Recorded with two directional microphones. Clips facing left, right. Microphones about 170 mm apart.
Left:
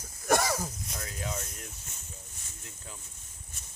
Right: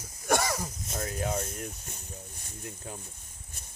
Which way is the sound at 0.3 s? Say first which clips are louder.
Left 1 dB; centre (ahead or behind).